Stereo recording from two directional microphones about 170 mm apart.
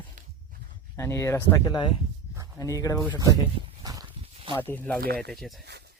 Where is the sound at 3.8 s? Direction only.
20° right (ahead or behind).